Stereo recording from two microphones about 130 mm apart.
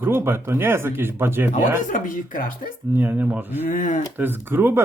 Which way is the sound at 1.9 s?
90° left.